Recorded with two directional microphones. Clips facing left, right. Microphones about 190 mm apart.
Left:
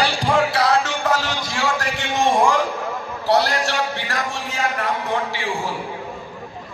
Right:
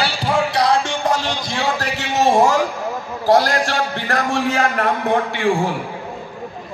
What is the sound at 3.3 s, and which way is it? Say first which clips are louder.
A man's voice: right 4 dB; 50° right (ahead or behind).